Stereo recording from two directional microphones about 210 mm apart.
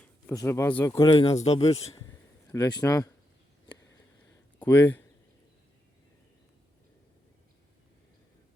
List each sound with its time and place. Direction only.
0.0 s speech: 10° left (ahead or behind)
0.9 s a man's voice: 25° left (ahead or behind)
2.5 s speech: 20° left (ahead or behind)
3.9 s a sound: 10° left (ahead or behind)